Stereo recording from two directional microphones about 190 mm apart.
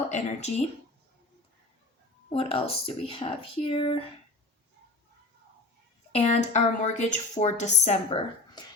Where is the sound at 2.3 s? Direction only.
30° left (ahead or behind).